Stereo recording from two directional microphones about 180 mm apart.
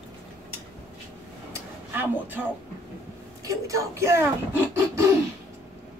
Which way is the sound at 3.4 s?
20° right (ahead or behind).